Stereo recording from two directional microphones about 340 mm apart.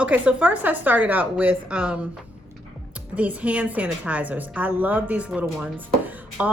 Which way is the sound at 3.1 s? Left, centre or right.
Centre.